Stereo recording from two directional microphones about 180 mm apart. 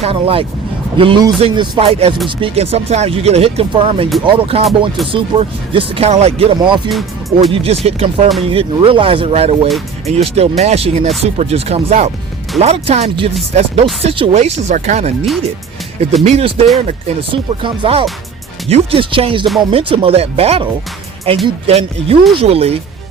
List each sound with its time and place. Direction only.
0.0 s speech: 30° right (ahead or behind)